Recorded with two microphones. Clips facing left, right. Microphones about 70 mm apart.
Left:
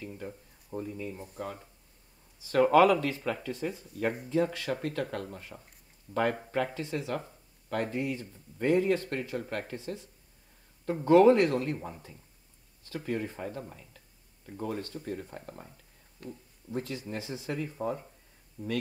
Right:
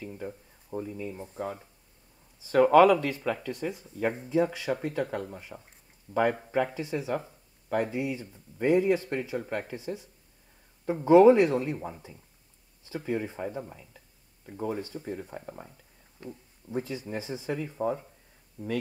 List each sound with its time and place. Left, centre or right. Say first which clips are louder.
0.0 s speech: right 3 dB; centre
1.2 s speech: right 4 dB; right
2.4 s speech: right 3 dB; centre
18.6 s speech: right 1 dB; right